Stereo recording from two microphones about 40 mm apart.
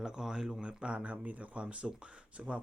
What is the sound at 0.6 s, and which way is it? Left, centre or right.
Speech, right.